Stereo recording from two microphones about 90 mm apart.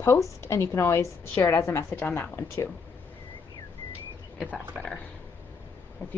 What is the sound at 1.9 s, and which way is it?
Speech, 25° left (ahead or behind).